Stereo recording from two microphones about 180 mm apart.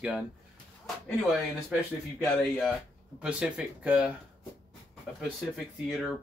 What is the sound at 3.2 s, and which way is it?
Speech, 5° right (ahead or behind).